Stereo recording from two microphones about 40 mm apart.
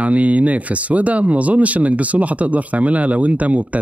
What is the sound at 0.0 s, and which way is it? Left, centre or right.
Speech, right.